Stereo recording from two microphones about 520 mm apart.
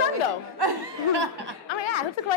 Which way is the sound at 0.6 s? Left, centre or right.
Right.